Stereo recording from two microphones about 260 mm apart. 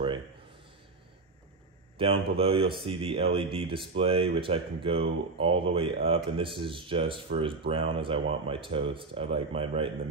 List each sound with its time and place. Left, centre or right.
2.0 s speech: right